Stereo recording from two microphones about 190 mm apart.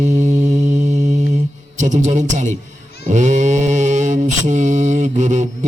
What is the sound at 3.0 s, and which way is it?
Mantra, 40° right (ahead or behind).